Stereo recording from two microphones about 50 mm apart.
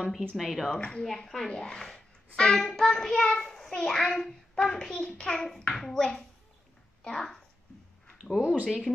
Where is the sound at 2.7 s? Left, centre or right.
Centre.